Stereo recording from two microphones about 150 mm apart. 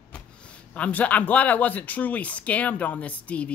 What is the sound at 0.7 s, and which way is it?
Speech, 10° left (ahead or behind).